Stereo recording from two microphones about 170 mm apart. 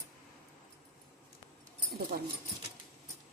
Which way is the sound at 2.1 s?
55° right (ahead or behind).